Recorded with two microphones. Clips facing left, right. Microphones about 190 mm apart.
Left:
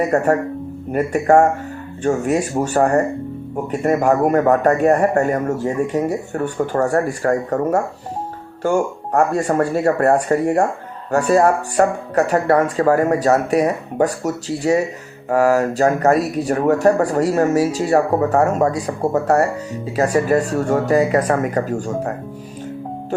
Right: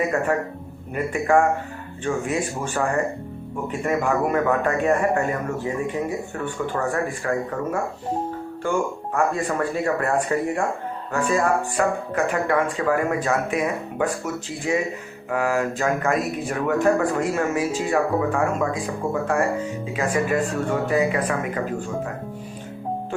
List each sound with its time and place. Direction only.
0.1 s a man's voice: 45° left (ahead or behind)